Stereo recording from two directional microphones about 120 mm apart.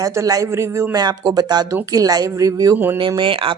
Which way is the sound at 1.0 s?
35° right (ahead or behind).